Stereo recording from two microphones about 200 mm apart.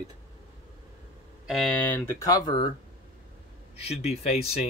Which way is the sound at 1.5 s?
5° left (ahead or behind).